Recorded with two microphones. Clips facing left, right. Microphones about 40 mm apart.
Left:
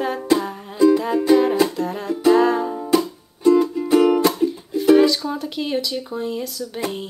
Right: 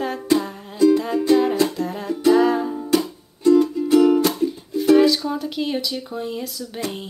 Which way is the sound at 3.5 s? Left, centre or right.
Centre.